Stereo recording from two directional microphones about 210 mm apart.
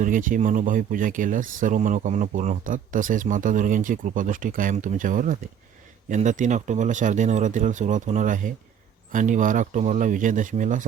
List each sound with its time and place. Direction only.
0.0 s speech: 40° right (ahead or behind)